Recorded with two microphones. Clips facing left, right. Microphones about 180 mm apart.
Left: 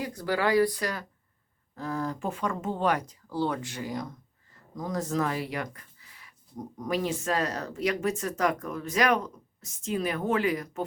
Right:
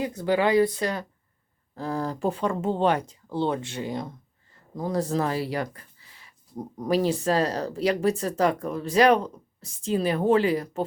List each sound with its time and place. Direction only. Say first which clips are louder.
0.0 s speech: right 5 dB; 20° right (ahead or behind)